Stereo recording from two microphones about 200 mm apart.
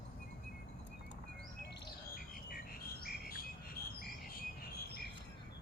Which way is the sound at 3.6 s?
50° left (ahead or behind).